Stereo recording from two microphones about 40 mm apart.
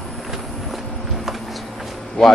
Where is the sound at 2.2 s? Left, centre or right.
Centre.